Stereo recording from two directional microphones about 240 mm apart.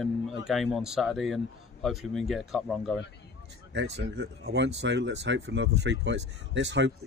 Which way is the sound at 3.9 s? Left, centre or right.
Right.